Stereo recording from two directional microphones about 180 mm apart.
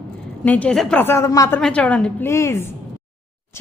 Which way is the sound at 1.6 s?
5° left (ahead or behind).